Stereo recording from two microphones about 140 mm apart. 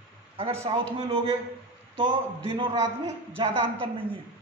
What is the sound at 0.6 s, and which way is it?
Speech, 40° right (ahead or behind).